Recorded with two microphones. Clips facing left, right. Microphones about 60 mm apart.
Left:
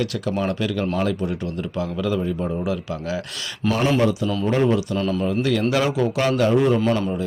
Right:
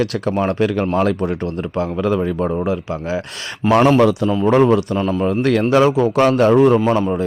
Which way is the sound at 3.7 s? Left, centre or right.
Right.